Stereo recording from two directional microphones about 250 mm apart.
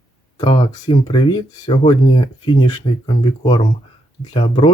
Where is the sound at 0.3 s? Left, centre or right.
Left.